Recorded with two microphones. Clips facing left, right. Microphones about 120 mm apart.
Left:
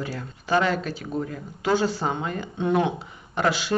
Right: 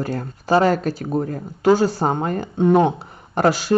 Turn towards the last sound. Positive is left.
turn(degrees=-40)  # may be behind; listen again after turning